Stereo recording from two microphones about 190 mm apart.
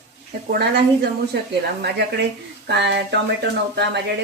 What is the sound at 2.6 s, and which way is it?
Speech, 65° right (ahead or behind).